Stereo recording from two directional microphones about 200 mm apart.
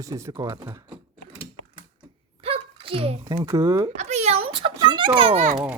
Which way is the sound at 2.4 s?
25° right (ahead or behind).